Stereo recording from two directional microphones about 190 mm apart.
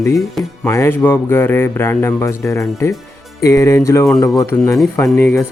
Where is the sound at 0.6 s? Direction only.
15° left (ahead or behind).